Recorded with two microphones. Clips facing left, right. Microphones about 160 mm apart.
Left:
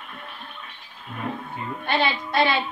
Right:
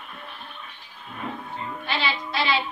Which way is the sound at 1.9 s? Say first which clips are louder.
Left 5 dB; 55° left (ahead or behind).